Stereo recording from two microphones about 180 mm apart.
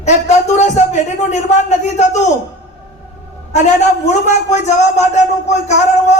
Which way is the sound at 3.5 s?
40° left (ahead or behind).